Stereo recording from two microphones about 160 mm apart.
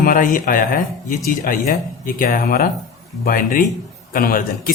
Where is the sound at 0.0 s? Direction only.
55° left (ahead or behind).